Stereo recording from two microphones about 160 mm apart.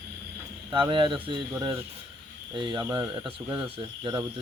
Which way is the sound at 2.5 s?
30° right (ahead or behind).